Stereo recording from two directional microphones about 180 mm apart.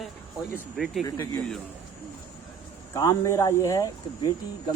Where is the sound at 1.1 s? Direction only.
15° left (ahead or behind).